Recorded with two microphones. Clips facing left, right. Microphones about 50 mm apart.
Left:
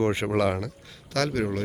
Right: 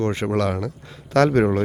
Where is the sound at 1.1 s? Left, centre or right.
Right.